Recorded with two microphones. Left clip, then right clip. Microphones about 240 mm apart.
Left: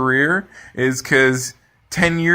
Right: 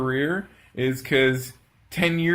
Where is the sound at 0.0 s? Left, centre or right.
Centre.